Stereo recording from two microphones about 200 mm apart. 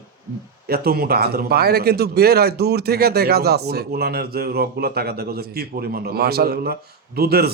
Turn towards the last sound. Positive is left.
turn(degrees=-50)  # may be behind; listen again after turning